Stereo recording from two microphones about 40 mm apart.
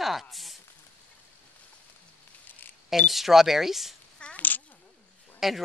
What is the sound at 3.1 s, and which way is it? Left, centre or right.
Speech, centre.